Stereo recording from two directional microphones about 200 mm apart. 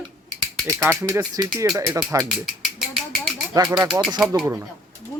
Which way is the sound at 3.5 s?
15° right (ahead or behind).